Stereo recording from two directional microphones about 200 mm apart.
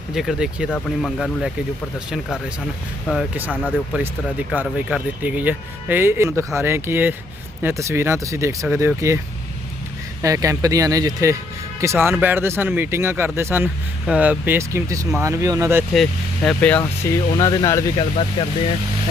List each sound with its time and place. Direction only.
0.1 s speech: centre (ahead or behind)
3.9 s speech: 10° right (ahead or behind)
10.2 s speech: 15° right (ahead or behind)
15.9 s speech: centre (ahead or behind)
17.3 s speech: 20° left (ahead or behind)